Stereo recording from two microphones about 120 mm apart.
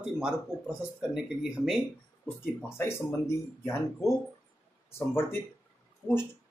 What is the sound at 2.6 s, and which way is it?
Speech, 20° left (ahead or behind).